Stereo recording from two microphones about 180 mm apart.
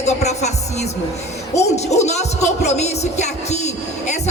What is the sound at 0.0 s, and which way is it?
Speech, 40° left (ahead or behind).